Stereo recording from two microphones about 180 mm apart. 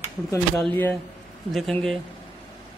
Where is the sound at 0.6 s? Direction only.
10° left (ahead or behind).